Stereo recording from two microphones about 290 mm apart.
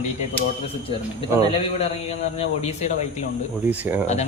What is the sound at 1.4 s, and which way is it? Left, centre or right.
A man's voice, left.